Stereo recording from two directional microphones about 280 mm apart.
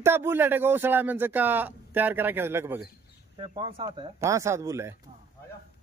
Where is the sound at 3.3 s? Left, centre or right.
Centre.